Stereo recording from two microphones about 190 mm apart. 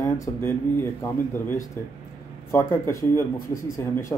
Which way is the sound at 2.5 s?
15° left (ahead or behind).